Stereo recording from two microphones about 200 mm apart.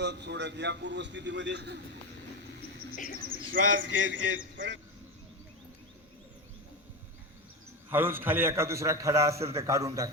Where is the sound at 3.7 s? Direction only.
65° right (ahead or behind).